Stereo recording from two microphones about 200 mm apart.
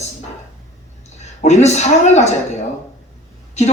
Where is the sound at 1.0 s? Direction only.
35° left (ahead or behind).